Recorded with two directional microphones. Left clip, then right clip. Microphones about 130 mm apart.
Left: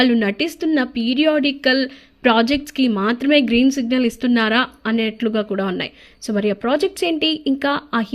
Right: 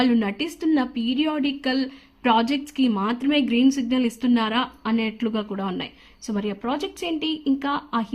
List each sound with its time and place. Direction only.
0.0 s a woman's voice: 20° left (ahead or behind)